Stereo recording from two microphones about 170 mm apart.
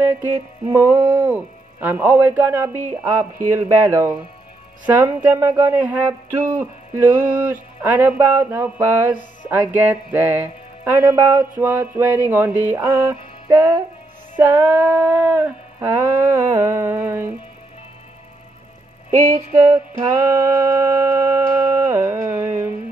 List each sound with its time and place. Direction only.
0.0 s music: 15° right (ahead or behind)
19.5 s music: 15° right (ahead or behind)